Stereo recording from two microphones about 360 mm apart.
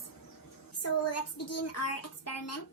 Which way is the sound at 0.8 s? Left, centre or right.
Left.